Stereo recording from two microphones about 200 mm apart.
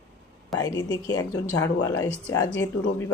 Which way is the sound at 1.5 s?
90° left.